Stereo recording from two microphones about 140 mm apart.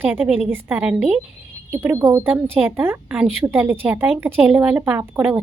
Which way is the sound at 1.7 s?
20° right (ahead or behind).